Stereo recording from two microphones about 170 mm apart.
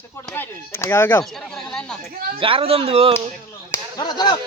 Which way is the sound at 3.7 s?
25° left (ahead or behind).